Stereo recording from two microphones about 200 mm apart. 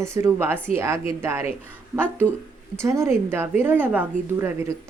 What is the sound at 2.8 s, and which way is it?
Speech, 15° right (ahead or behind).